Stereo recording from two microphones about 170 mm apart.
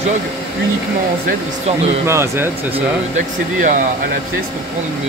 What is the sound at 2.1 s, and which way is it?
Speech, 15° right (ahead or behind).